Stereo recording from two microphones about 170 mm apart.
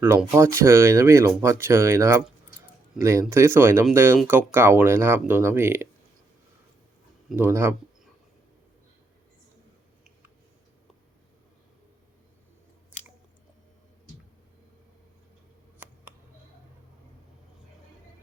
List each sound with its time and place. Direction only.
0.0 s speech: 10° right (ahead or behind)
7.3 s speech: 15° right (ahead or behind)